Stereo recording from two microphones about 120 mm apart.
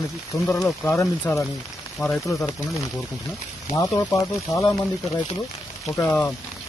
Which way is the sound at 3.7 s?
25° left (ahead or behind).